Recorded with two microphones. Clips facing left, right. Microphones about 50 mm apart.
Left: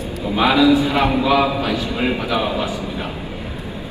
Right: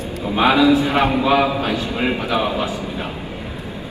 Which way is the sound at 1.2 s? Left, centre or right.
Right.